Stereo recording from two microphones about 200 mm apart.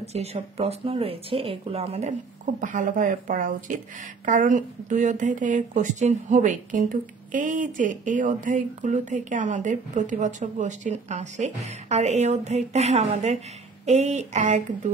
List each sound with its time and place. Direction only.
0.0 s a woman's voice: 30° right (ahead or behind)